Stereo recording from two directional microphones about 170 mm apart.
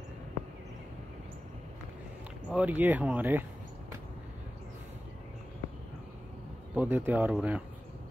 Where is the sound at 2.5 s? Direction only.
10° right (ahead or behind).